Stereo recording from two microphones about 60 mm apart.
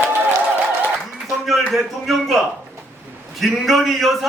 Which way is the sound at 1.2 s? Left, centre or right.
Centre.